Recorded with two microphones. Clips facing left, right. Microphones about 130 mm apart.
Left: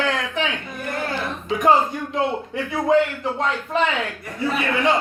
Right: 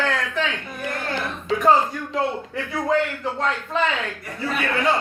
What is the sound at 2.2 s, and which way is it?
A man's voice, 20° left (ahead or behind).